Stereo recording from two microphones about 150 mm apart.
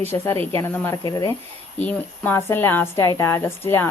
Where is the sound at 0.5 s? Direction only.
15° left (ahead or behind).